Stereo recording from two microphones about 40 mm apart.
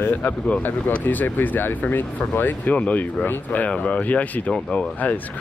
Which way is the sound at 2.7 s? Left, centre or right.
Left.